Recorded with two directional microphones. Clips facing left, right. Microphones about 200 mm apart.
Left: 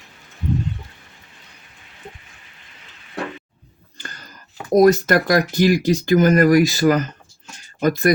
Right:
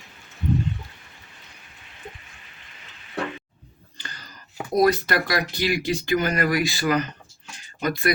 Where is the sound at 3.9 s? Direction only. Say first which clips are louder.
Left 3 dB; 50° left (ahead or behind).